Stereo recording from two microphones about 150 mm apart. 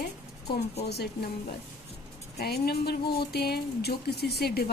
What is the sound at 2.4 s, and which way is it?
Speech, 90° left.